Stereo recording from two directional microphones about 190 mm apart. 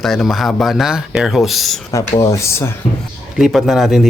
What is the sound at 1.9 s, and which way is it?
Speech, 15° left (ahead or behind).